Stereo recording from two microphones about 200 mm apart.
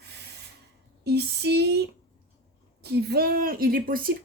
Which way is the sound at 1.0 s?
55° right (ahead or behind).